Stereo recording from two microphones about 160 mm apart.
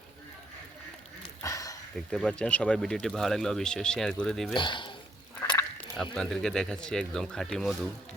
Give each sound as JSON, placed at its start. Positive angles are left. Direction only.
{"t": 1.4, "sound": "a sound", "side_deg": 20}
{"t": 2.0, "sound": "speech", "side_deg": 5}
{"t": 4.5, "sound": "speech", "side_deg": 30}
{"t": 5.4, "sound": "frog", "side_deg": 20}
{"t": 6.1, "sound": "speech", "side_deg": 5}